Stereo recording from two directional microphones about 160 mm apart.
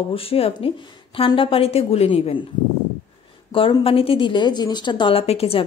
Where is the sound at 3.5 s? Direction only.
35° left (ahead or behind).